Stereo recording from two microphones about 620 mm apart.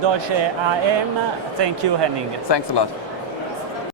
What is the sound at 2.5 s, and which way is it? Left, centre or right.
Speech, left.